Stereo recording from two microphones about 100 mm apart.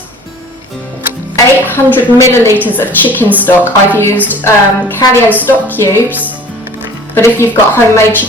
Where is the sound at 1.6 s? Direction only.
20° left (ahead or behind).